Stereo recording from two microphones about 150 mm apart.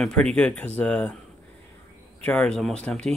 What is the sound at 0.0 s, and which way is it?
Speech, 5° left (ahead or behind).